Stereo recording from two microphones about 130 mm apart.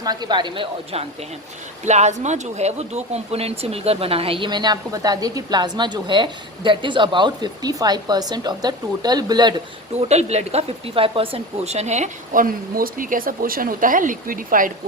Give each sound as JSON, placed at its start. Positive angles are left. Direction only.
{"t": 0.0, "sound": "speech", "side_deg": -30}
{"t": 1.8, "sound": "speech", "side_deg": -60}
{"t": 10.0, "sound": "speech", "side_deg": -55}